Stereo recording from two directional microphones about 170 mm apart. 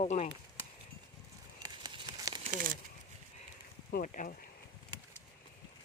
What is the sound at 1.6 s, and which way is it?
Crumpling, 25° right (ahead or behind).